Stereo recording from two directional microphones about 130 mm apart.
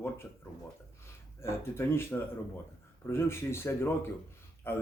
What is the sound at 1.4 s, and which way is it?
Speech, 20° left (ahead or behind).